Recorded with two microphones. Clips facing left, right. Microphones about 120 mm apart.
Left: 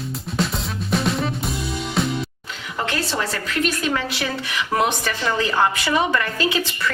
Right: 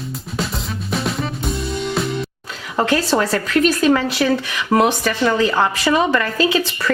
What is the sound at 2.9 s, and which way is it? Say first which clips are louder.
A woman's voice: right 8 dB; 40° right (ahead or behind).